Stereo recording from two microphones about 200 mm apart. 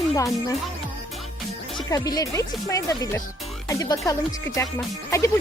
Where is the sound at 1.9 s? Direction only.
20° left (ahead or behind).